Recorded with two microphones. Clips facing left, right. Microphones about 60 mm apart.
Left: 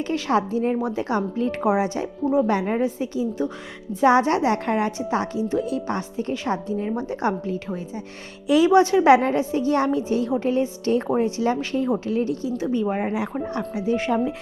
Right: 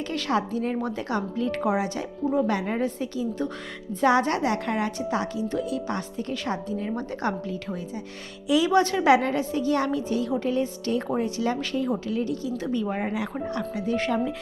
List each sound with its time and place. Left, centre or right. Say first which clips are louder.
0.1 s a woman's voice: left 4 dB; left
1.1 s a woman's voice: left 2 dB; left
4.0 s a woman's voice: left 4 dB; left
7.4 s a woman's voice: left 4 dB; left
8.7 s a woman's voice: left 5 dB; centre
9.0 s a woman's voice: left 4 dB; left; by 14.2 s centre